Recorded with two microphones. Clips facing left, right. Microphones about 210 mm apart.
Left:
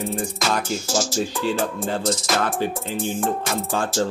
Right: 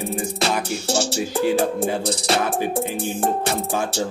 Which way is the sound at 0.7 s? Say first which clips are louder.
Right 1 dB; 65° right (ahead or behind).